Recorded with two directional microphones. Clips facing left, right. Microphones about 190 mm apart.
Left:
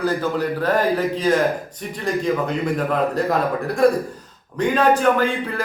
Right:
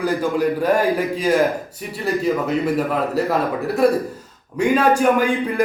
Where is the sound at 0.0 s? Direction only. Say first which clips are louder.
Right 2 dB; 10° right (ahead or behind).